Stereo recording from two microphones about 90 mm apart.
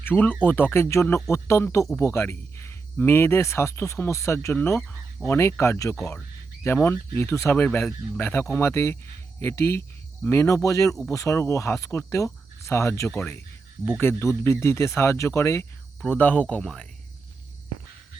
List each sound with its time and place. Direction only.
0.0 s speech: 20° left (ahead or behind)
7.5 s speech: 20° left (ahead or behind)
16.0 s speech: 20° left (ahead or behind)